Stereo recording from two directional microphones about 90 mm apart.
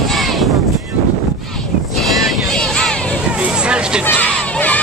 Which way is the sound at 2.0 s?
5° left (ahead or behind).